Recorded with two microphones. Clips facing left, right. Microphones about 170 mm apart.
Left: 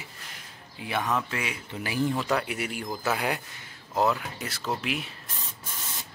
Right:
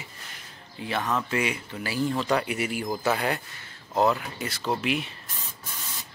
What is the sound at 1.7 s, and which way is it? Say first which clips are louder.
Speech: even; 20° left (ahead or behind).